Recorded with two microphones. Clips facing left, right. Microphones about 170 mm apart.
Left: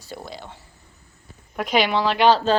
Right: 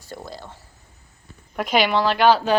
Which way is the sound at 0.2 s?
Centre (ahead or behind).